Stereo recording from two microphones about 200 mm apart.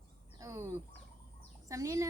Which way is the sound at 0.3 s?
15° right (ahead or behind).